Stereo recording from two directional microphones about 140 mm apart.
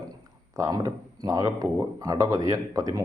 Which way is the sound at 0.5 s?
25° right (ahead or behind).